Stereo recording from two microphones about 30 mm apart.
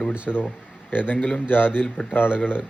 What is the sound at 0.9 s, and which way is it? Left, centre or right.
Speech, left.